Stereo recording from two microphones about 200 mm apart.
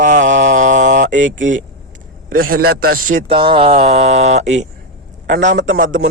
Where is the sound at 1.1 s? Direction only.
70° right (ahead or behind).